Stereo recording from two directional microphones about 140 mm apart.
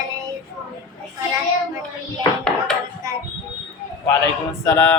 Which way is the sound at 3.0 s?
25° right (ahead or behind).